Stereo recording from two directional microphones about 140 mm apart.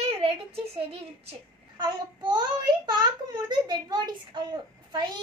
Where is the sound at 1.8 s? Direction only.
30° right (ahead or behind).